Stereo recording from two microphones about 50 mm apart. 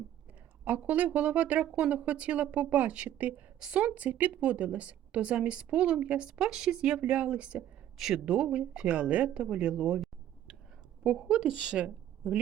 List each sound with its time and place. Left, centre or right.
0.8 s a woman's voice: right
7.9 s speech: centre
8.2 s a woman's voice: right
11.0 s a woman's voice: centre